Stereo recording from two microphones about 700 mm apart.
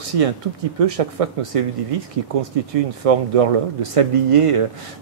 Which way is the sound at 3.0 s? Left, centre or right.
Right.